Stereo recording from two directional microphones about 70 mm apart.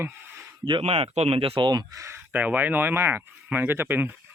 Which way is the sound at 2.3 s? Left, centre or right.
Right.